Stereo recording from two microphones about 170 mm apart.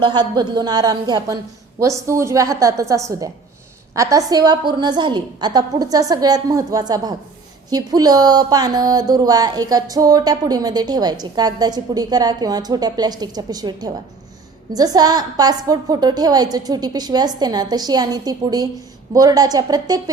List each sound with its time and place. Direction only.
0.0 s speech: 25° right (ahead or behind)